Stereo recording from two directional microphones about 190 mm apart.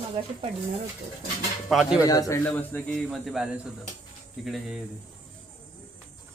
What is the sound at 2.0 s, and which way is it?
Speech, 15° left (ahead or behind).